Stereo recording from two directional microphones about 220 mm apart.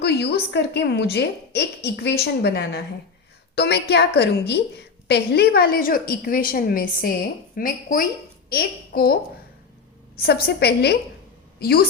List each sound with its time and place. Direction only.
0.0 s a woman's voice: 50° left (ahead or behind)
10.4 s a woman's voice: 45° left (ahead or behind)